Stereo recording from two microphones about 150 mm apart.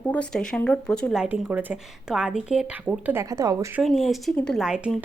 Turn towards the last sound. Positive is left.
turn(degrees=-5)  # may be behind; listen again after turning